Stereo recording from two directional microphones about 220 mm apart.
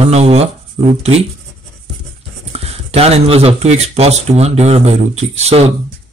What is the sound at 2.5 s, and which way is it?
Speech, 30° right (ahead or behind).